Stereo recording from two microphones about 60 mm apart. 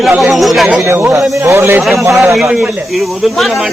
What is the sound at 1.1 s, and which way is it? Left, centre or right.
Speech, right.